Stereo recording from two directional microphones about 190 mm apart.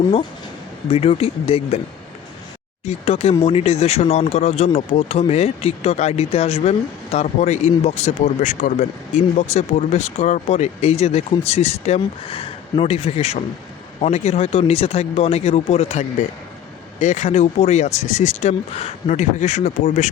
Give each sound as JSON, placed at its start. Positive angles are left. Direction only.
{"t": 0.9, "sound": "speech", "side_deg": 30}
{"t": 2.8, "sound": "speech", "side_deg": 30}